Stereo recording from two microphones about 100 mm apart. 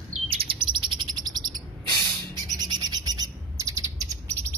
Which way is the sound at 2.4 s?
40° right (ahead or behind).